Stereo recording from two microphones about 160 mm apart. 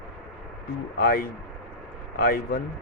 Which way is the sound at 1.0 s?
65° left (ahead or behind).